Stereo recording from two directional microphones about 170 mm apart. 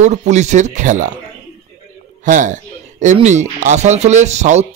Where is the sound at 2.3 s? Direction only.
50° right (ahead or behind).